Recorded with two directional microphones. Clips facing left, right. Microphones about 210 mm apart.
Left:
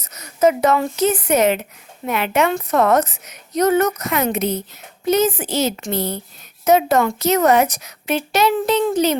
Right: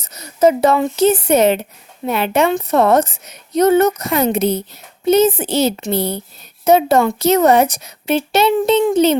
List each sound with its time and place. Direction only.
0.0 s a woman's voice: 30° right (ahead or behind)